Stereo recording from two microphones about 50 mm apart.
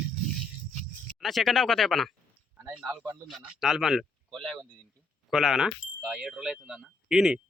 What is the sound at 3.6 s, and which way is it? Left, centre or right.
Speech, centre.